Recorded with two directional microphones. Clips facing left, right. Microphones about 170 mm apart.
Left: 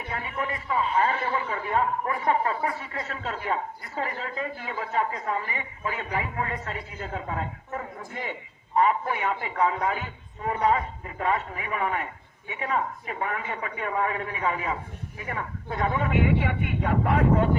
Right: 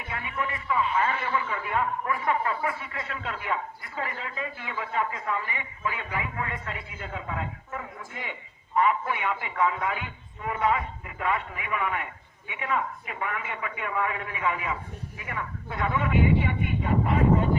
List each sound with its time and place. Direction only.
0.1 s a man's voice: 35° left (ahead or behind)
16.1 s speech: 70° left (ahead or behind)